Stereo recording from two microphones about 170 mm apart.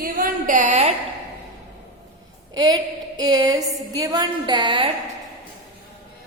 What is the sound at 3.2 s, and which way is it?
A woman's voice, 20° right (ahead or behind).